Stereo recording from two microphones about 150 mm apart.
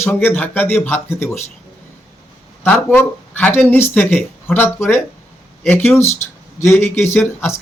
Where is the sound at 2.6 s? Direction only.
10° left (ahead or behind).